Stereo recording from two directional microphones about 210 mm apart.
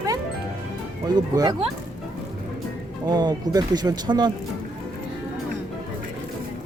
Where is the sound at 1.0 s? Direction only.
20° right (ahead or behind).